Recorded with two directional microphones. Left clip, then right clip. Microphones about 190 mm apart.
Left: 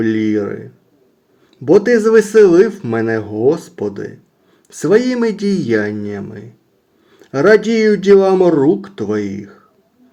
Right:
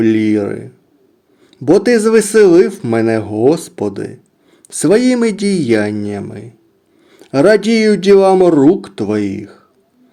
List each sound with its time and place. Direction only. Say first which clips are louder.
0.0 s speech: right 3 dB; 35° right (ahead or behind)